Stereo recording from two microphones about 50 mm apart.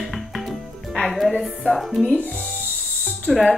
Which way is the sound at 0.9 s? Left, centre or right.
Centre.